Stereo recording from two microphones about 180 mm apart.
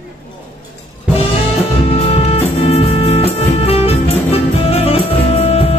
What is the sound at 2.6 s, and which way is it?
Music, 35° left (ahead or behind).